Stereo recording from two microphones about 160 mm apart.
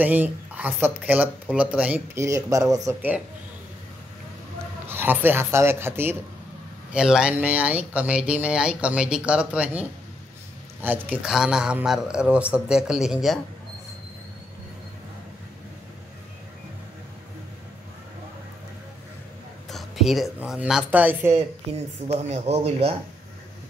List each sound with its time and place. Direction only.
0.0 s speech: 10° right (ahead or behind)
4.8 s speech: 15° right (ahead or behind)
19.7 s a sound: centre (ahead or behind)
20.3 s speech: 5° right (ahead or behind)
22.0 s speech: 40° right (ahead or behind)